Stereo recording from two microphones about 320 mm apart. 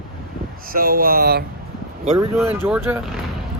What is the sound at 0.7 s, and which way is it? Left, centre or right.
Speech, right.